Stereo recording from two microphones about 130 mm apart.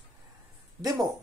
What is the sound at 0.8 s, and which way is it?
Speech, 30° right (ahead or behind).